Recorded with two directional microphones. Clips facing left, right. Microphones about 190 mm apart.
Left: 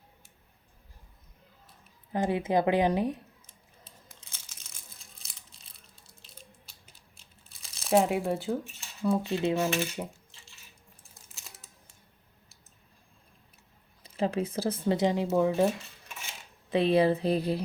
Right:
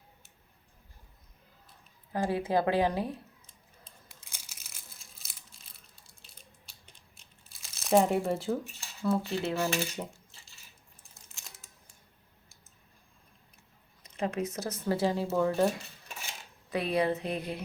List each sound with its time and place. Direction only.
2.1 s speech: 20° left (ahead or behind)
4.2 s crumpling: 10° right (ahead or behind)
7.5 s crumpling: centre (ahead or behind)
9.0 s coin: 15° left (ahead or behind)
11.1 s a sound: centre (ahead or behind)
14.0 s speech: 30° left (ahead or behind); by 15.7 s 15° left (ahead or behind)
16.6 s speech: 25° left (ahead or behind)